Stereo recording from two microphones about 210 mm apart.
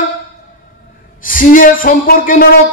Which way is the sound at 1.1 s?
40° left (ahead or behind).